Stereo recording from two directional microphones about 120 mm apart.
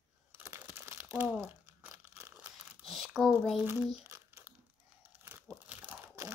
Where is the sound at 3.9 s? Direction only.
20° right (ahead or behind).